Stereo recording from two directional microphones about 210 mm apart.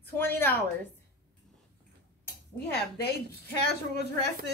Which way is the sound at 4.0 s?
50° left (ahead or behind).